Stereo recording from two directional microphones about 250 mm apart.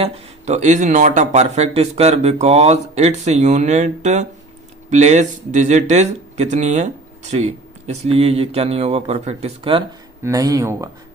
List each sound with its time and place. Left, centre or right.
0.0 s speech: right